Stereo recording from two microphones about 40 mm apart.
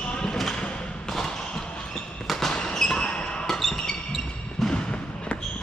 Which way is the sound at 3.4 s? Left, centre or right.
Centre.